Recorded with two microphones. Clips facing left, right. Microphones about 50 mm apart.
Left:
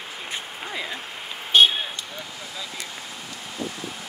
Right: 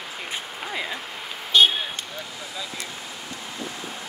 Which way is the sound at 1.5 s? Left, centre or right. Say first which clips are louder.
Left 1 dB; left.